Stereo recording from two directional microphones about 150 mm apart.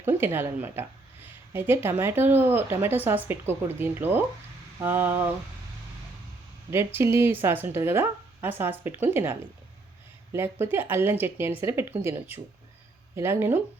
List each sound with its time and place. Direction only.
0.0 s speech: 15° right (ahead or behind)
6.7 s speech: 15° right (ahead or behind)